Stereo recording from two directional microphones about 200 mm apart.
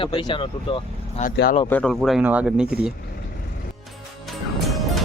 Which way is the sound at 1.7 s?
5° left (ahead or behind).